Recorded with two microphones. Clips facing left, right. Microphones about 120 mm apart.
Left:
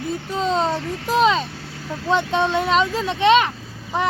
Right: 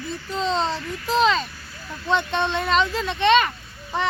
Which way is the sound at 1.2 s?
5° left (ahead or behind).